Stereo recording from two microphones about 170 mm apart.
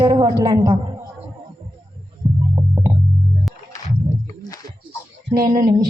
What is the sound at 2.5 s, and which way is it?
Hum, 25° right (ahead or behind).